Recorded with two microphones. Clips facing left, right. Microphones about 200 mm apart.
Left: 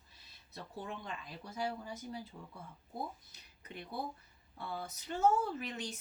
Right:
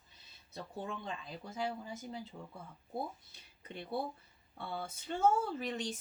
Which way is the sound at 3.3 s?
30° right (ahead or behind).